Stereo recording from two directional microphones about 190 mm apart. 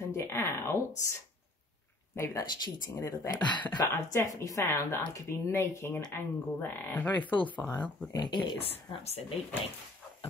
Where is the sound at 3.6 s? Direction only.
10° left (ahead or behind).